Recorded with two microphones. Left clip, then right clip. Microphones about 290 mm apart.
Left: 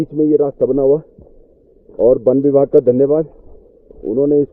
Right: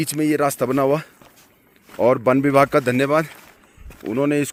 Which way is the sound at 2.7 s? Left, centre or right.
Right.